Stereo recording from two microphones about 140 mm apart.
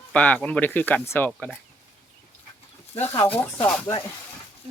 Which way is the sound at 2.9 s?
45° left (ahead or behind).